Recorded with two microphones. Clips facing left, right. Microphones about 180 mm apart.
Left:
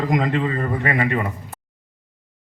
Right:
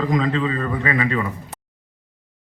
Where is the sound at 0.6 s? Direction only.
40° left (ahead or behind).